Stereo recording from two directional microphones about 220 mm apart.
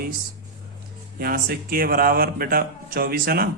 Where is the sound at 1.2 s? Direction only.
45° right (ahead or behind).